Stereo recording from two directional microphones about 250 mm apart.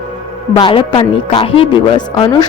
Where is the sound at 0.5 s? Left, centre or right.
Centre.